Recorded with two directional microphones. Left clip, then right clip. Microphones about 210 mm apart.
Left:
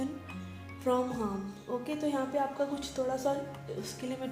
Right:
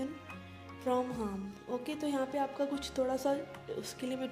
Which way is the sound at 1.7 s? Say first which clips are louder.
Left 3 dB; 55° right (ahead or behind).